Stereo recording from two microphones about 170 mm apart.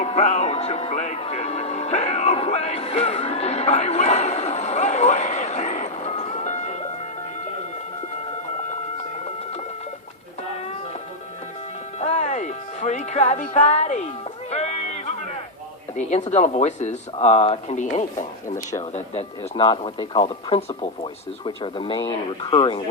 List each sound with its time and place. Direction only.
0.0 s music: 40° left (ahead or behind)
11.9 s music: 40° left (ahead or behind)
14.5 s a sound: 40° left (ahead or behind)
16.0 s speech: 45° left (ahead or behind)